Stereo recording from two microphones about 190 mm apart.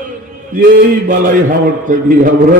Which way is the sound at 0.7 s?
45° right (ahead or behind).